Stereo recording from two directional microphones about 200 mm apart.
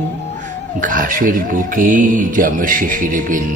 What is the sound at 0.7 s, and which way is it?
Mantra, 40° right (ahead or behind).